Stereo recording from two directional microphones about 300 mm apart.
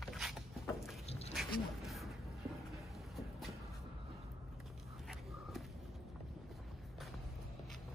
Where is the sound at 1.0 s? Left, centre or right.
Left.